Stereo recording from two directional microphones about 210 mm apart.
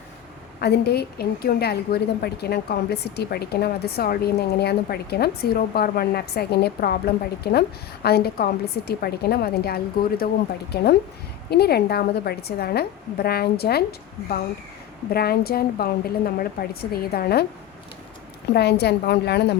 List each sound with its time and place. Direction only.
0.6 s a woman's voice: 50° left (ahead or behind)
11.5 s a woman's voice: 50° left (ahead or behind)
15.1 s a woman's voice: 45° left (ahead or behind)
18.5 s a woman's voice: 50° left (ahead or behind)